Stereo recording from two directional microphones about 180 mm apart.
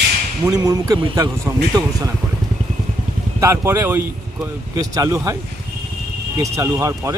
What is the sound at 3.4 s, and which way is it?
Speech, 15° right (ahead or behind).